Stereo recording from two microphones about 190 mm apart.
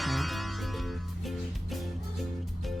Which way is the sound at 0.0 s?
Centre (ahead or behind).